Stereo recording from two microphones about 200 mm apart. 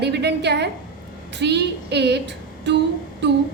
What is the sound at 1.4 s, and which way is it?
Female singing, 55° right (ahead or behind).